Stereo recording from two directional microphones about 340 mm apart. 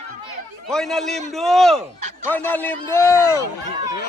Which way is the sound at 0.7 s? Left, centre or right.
Centre.